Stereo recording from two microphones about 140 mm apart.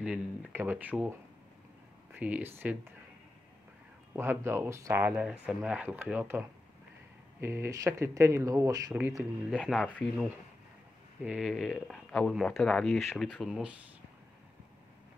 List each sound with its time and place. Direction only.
0.0 s speech: 5° right (ahead or behind)
2.1 s speech: 10° right (ahead or behind)
4.1 s speech: 15° right (ahead or behind)
9.1 s speech: centre (ahead or behind)
11.2 s speech: 5° right (ahead or behind)